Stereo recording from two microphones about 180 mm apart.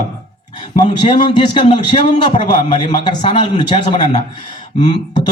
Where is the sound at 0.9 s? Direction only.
25° left (ahead or behind).